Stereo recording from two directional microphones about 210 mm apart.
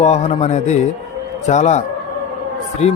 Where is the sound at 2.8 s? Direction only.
30° left (ahead or behind).